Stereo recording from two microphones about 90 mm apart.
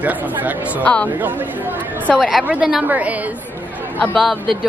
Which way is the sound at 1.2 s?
20° right (ahead or behind).